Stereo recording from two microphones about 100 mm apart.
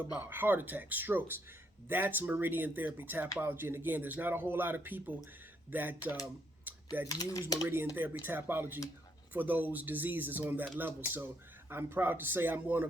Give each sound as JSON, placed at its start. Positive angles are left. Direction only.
{"t": 0.2, "sound": "speech", "side_deg": -20}
{"t": 6.7, "sound": "typing", "side_deg": -20}
{"t": 7.1, "sound": "speech", "side_deg": 40}
{"t": 7.9, "sound": "speech", "side_deg": -20}